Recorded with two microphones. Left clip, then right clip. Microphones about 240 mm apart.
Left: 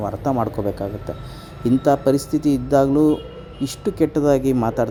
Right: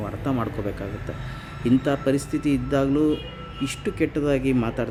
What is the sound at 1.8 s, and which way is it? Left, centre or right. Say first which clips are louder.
Speech: left 6 dB; centre.